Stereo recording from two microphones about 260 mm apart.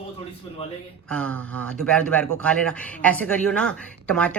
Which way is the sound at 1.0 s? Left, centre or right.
Centre.